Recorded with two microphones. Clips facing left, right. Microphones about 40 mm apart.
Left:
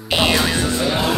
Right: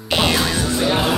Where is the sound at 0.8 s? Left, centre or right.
Centre.